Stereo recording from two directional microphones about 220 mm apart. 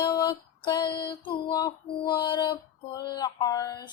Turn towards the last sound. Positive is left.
turn(degrees=15)  # may be behind; listen again after turning